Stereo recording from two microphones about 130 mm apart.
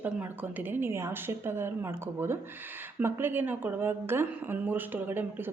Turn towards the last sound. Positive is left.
turn(degrees=-15)  # may be behind; listen again after turning